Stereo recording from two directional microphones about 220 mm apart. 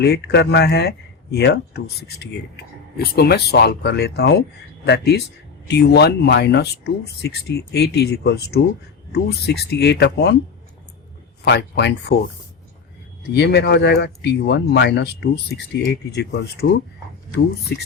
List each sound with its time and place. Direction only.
0.0 s speech: 50° left (ahead or behind)
11.4 s speech: 50° left (ahead or behind)
13.3 s speech: 50° left (ahead or behind)
17.7 s speech: 50° left (ahead or behind)